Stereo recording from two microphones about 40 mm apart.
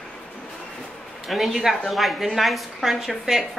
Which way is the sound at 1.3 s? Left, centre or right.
Centre.